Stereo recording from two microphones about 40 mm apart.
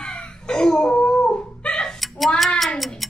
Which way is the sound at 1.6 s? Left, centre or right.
Left.